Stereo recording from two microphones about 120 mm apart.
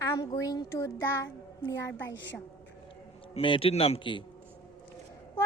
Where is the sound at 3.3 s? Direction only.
50° left (ahead or behind).